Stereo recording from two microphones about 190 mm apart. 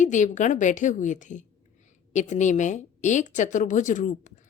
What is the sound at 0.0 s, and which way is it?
Speech, 40° left (ahead or behind).